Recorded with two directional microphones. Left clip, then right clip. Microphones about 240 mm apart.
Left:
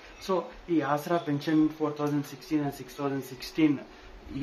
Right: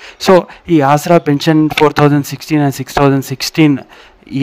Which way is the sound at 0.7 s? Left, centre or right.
Right.